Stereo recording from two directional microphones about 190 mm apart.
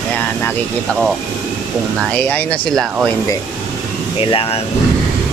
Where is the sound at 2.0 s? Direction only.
5° left (ahead or behind).